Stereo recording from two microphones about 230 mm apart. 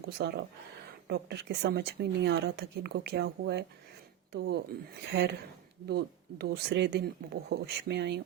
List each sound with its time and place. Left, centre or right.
0.0 s speech: right